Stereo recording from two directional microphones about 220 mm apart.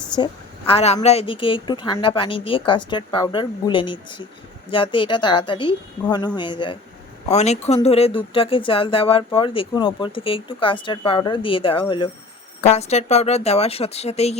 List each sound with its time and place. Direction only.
0.7 s speech: 25° left (ahead or behind)